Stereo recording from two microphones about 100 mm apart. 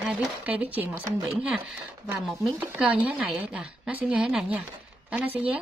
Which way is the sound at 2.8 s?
10° right (ahead or behind).